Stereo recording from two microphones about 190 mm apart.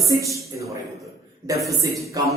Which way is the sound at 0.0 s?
15° right (ahead or behind).